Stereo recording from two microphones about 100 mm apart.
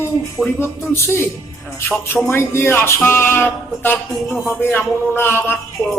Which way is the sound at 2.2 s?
25° left (ahead or behind).